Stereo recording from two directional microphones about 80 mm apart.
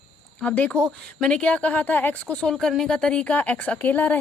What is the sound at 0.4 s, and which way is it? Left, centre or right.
A woman's voice, centre.